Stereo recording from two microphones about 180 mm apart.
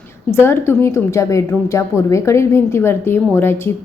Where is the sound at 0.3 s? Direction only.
15° left (ahead or behind).